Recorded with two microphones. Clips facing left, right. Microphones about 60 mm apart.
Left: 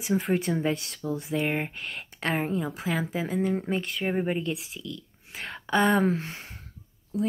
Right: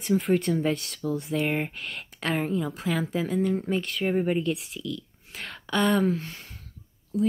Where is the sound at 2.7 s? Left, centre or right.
Centre.